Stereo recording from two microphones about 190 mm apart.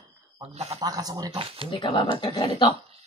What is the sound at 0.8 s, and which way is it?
Speech, 20° right (ahead or behind).